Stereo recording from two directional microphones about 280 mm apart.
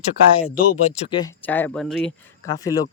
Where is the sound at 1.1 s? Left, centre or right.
Centre.